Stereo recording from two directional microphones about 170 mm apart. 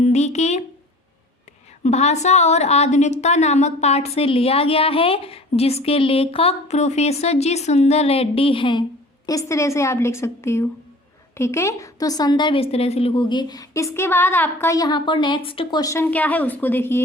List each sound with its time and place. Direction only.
0.0 s speech: 40° left (ahead or behind)
1.8 s a woman's voice: 40° left (ahead or behind)
9.2 s a woman's voice: 20° left (ahead or behind)
15.8 s a woman's voice: 15° left (ahead or behind)